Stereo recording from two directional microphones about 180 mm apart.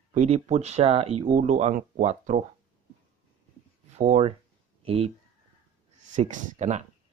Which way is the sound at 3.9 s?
40° right (ahead or behind).